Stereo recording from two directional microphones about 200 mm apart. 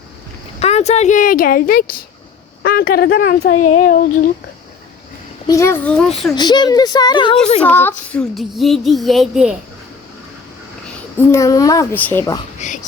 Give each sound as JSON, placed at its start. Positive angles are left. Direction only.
{"t": 0.6, "sound": "speech", "side_deg": 35}
{"t": 3.6, "sound": "speech", "side_deg": 40}
{"t": 5.5, "sound": "a child's voice", "side_deg": 15}
{"t": 6.3, "sound": "speech", "side_deg": 20}
{"t": 7.6, "sound": "child singing", "side_deg": 10}
{"t": 11.3, "sound": "a child's voice", "side_deg": 15}
{"t": 12.5, "sound": "speech", "side_deg": 40}